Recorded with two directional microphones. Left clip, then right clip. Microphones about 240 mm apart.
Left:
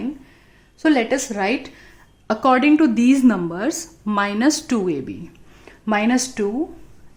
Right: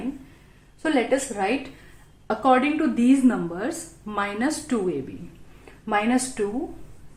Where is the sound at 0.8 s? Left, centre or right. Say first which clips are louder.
Left 4 dB; left.